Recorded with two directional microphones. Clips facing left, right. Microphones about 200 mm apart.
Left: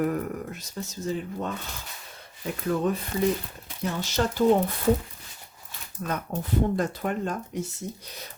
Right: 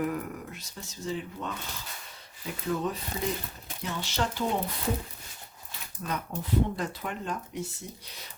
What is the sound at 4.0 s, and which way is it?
Speech, 45° left (ahead or behind).